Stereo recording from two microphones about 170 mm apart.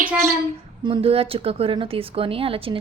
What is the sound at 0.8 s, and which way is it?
Speech, 30° right (ahead or behind).